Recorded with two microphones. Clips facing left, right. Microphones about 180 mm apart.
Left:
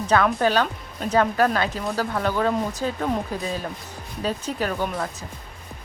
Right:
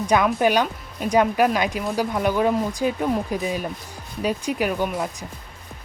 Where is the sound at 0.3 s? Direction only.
15° right (ahead or behind).